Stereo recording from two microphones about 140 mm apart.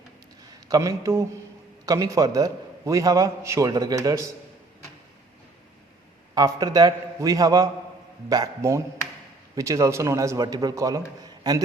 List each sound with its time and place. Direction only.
0.7 s a man's voice: 20° right (ahead or behind)
6.3 s a man's voice: 25° right (ahead or behind)